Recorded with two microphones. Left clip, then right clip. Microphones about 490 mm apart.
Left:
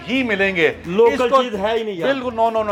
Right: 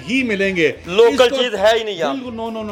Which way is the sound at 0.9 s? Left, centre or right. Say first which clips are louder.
Right 3 dB; right.